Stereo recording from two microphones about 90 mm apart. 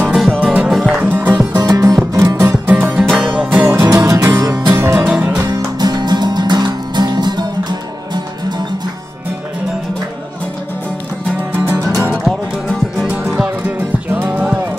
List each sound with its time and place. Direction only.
0.1 s music: 10° right (ahead or behind)
1.0 s music: 20° right (ahead or behind)
1.6 s music: 40° right (ahead or behind)
2.4 s music: 20° right (ahead or behind)
3.6 s music: 25° right (ahead or behind)
4.0 s music: 40° right (ahead or behind)
4.3 s music: 25° right (ahead or behind)
5.1 s music: 10° right (ahead or behind)
5.4 s music: 45° right (ahead or behind)
11.5 s music: 15° right (ahead or behind)
12.3 s music: 5° right (ahead or behind)